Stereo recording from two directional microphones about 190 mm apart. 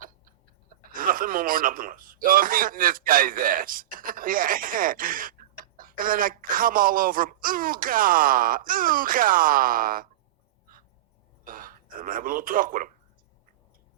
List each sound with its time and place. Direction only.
0.9 s a man's voice: 45° right (ahead or behind)
11.4 s speech: 50° right (ahead or behind)